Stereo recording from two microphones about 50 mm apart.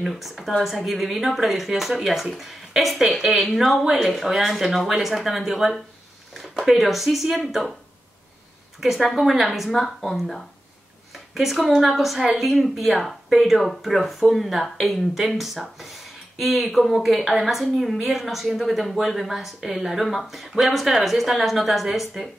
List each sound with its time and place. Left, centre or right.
0.0 s speech: centre
8.8 s speech: centre